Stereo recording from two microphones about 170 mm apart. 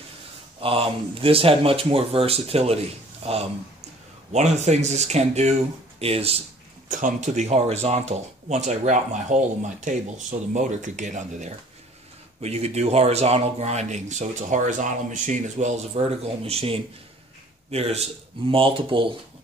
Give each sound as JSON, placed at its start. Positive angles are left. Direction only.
{"t": 0.6, "sound": "speech", "side_deg": -35}
{"t": 6.9, "sound": "speech", "side_deg": -50}